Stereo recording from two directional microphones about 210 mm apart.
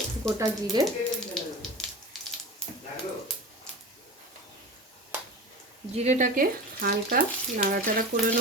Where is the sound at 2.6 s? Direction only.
5° left (ahead or behind).